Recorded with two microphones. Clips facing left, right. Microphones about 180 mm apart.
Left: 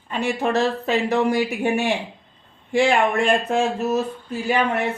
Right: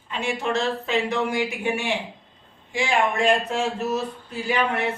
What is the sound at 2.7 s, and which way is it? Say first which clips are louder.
Speech: left 5 dB; 60° left (ahead or behind).